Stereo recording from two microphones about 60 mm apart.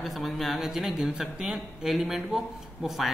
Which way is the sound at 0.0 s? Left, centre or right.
Centre.